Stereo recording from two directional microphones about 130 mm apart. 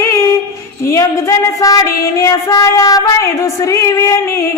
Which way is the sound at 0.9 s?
25° left (ahead or behind).